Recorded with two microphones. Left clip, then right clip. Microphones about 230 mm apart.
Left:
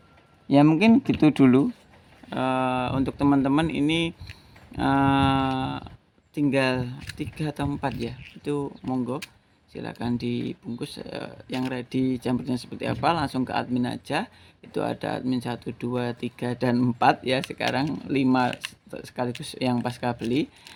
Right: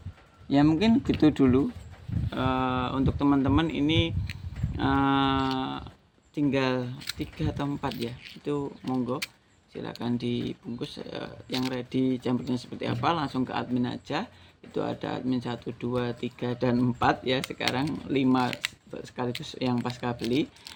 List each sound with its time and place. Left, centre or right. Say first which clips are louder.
0.4 s speech: left 5 dB; left